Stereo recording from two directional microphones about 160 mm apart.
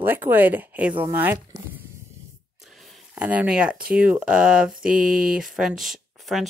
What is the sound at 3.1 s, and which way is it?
Speech, 10° right (ahead or behind).